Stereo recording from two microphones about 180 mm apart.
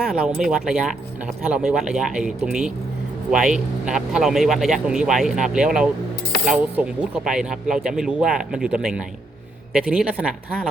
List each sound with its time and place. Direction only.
0.1 s speech: 5° right (ahead or behind)